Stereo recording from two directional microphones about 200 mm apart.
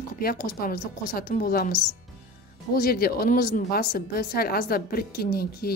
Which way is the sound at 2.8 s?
50° left (ahead or behind).